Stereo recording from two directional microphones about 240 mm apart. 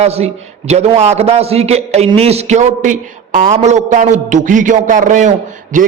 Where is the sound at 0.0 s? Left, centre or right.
Right.